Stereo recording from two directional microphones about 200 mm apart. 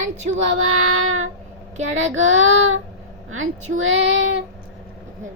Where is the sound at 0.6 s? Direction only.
90° right.